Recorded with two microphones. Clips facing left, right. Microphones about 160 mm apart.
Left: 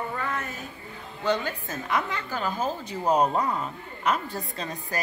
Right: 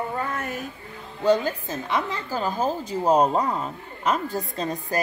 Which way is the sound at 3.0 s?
20° right (ahead or behind).